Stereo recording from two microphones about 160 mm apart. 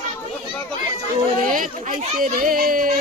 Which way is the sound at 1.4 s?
55° right (ahead or behind).